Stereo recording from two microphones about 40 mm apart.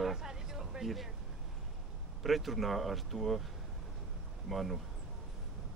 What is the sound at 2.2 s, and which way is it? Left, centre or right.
A man's voice, centre.